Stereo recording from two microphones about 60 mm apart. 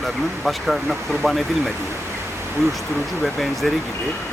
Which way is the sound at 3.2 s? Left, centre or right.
Centre.